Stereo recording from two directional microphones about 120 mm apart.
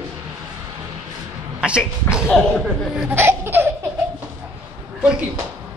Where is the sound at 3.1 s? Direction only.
20° right (ahead or behind).